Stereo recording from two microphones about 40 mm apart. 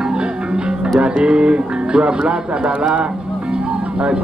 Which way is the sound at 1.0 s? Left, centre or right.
Right.